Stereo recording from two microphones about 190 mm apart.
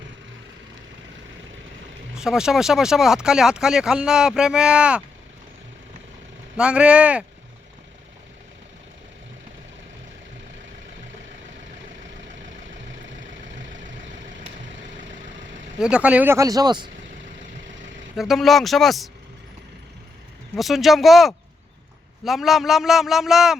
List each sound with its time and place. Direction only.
2.1 s speech: 5° right (ahead or behind)
6.6 s speech: 5° right (ahead or behind)
12.9 s vehicle: 80° right
15.8 s speech: 5° right (ahead or behind); by 16.9 s 20° right (ahead or behind)
18.2 s speech: centre (ahead or behind)
20.6 s speech: centre (ahead or behind)